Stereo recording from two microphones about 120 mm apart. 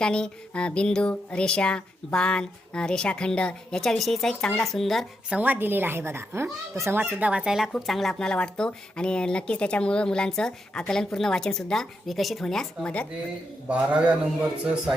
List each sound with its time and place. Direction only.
0.0 s speech: 5° left (ahead or behind)
5.3 s speech: 15° right (ahead or behind); by 13.1 s 10° left (ahead or behind)
13.7 s speech: 10° right (ahead or behind)